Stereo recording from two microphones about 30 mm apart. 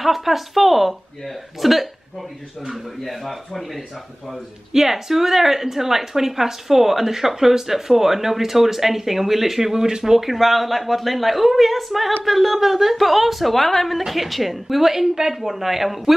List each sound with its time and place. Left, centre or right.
0.0 s a woman's voice: centre
4.7 s a woman's voice: centre
9.8 s speech: right
10.1 s a woman's voice: centre